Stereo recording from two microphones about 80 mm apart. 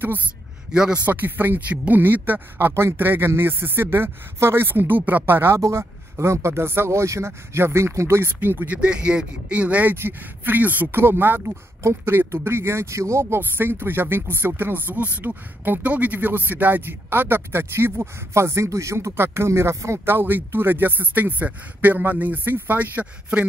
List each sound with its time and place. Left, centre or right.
0.7 s a man's voice: centre
1.0 s speech: right
8.4 s speech: right